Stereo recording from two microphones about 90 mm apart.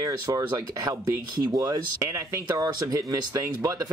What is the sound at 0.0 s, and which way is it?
Speech, 40° right (ahead or behind).